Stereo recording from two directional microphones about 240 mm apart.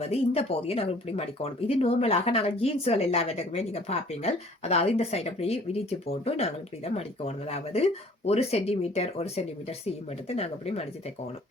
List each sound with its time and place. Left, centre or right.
0.0 s speech: left